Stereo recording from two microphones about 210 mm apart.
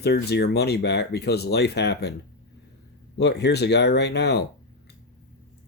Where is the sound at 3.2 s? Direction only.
55° left (ahead or behind).